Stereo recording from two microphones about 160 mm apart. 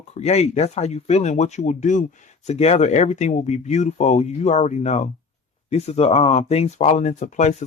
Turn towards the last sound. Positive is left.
turn(degrees=45)  # may be behind; listen again after turning